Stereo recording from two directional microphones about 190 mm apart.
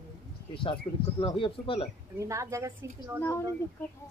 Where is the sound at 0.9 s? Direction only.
15° left (ahead or behind).